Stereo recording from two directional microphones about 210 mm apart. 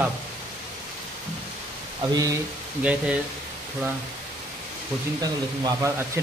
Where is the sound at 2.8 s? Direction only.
5° right (ahead or behind).